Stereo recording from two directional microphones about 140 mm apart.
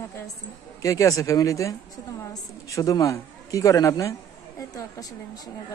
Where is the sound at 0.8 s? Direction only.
25° left (ahead or behind).